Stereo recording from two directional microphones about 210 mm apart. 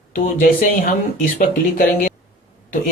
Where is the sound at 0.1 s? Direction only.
45° left (ahead or behind).